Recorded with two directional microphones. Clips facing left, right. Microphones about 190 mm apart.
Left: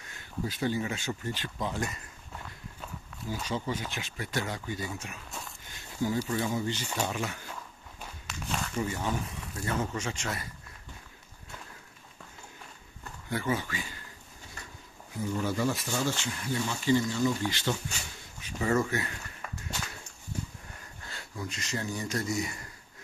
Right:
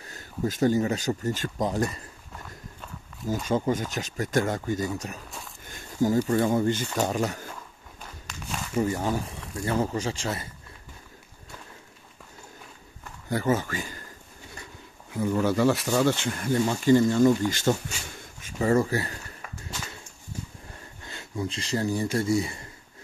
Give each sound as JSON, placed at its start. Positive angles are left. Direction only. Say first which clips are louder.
{"t": 0.0, "sound": "speech", "louder": "right 6 dB", "side_deg": -40}
{"t": 3.4, "sound": "speech", "louder": "right 8 dB", "side_deg": -50}
{"t": 8.3, "sound": "walk", "louder": "left 1 dB", "side_deg": 5}
{"t": 8.7, "sound": "speech", "louder": "right 8 dB", "side_deg": -40}
{"t": 13.3, "sound": "speech", "louder": "right 6 dB", "side_deg": -40}
{"t": 15.1, "sound": "speech", "louder": "right 7 dB", "side_deg": -70}
{"t": 21.1, "sound": "speech", "louder": "right 7 dB", "side_deg": -25}